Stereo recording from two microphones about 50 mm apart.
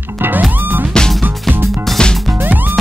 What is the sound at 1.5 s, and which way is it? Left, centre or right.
Music, centre.